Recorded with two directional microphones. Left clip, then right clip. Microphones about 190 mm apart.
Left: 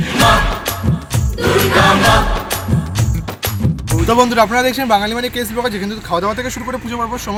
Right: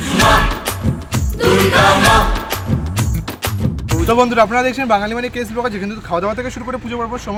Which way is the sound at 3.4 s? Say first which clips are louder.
Even; centre (ahead or behind).